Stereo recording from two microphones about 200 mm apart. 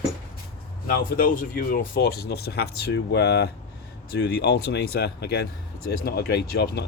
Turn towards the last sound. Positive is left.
turn(degrees=55)  # may be behind; listen again after turning